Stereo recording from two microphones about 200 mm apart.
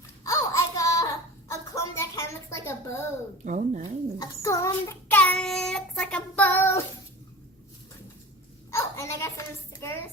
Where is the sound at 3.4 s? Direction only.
35° right (ahead or behind).